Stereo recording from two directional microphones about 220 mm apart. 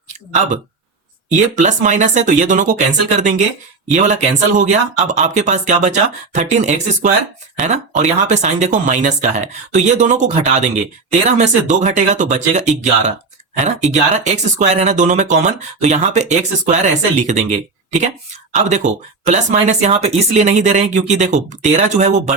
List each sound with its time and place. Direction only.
1.3 s speech: 35° right (ahead or behind)